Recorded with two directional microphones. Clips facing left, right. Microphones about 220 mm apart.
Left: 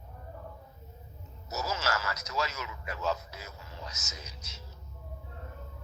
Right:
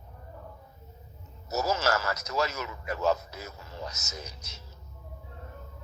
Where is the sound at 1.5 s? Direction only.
40° right (ahead or behind).